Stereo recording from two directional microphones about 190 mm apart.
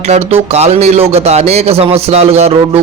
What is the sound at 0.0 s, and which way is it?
A man's voice, 30° right (ahead or behind).